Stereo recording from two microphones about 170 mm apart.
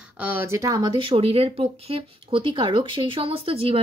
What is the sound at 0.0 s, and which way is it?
A woman's voice, 10° right (ahead or behind).